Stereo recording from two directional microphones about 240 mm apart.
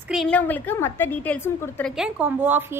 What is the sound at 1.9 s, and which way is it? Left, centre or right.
Speech, centre.